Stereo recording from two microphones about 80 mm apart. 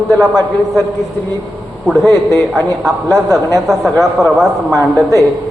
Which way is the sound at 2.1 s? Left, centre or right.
Right.